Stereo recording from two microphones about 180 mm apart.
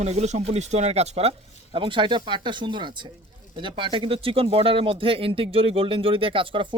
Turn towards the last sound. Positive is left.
turn(degrees=-30)  # may be behind; listen again after turning